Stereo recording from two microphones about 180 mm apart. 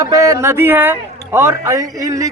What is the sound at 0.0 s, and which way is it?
A man's voice, 20° right (ahead or behind).